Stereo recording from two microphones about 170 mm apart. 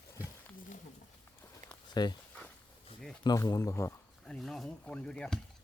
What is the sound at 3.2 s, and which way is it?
Speech, 20° left (ahead or behind).